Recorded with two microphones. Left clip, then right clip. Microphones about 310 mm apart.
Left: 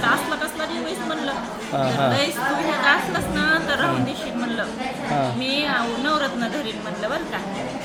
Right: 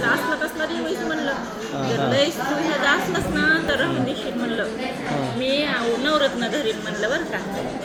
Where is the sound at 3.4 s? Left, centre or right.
Centre.